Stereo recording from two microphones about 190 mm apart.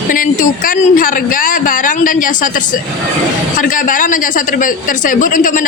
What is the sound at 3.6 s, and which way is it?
A woman's voice, 45° left (ahead or behind).